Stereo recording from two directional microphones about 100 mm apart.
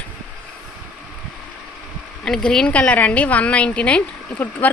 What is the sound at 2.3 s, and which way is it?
A woman's voice, 10° left (ahead or behind).